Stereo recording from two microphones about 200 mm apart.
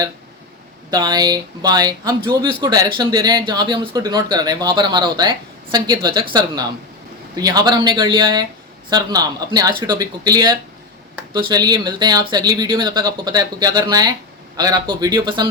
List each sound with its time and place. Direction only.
0.9 s speech: 20° right (ahead or behind)